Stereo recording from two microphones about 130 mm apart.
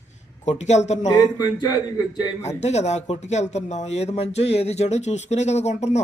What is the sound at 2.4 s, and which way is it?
Speech, 60° left (ahead or behind).